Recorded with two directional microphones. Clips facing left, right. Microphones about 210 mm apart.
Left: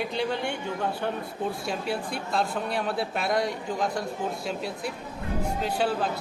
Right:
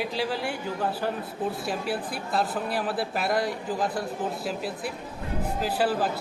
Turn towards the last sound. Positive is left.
turn(degrees=-5)  # may be behind; listen again after turning